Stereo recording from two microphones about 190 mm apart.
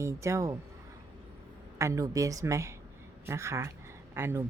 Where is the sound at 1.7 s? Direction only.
15° right (ahead or behind).